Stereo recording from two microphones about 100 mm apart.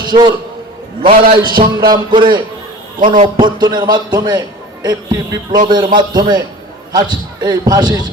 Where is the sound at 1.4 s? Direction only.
45° right (ahead or behind).